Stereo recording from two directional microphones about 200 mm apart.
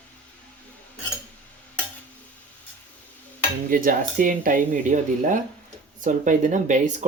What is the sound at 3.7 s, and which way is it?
Speech, 45° right (ahead or behind).